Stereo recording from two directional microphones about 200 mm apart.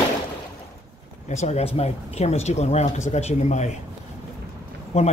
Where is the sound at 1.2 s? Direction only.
35° left (ahead or behind).